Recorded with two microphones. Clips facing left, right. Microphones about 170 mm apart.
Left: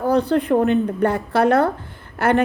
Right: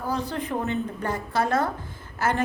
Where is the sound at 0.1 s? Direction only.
65° left (ahead or behind).